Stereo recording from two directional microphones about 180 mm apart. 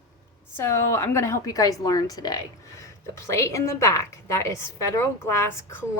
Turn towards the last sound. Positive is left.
turn(degrees=15)  # may be behind; listen again after turning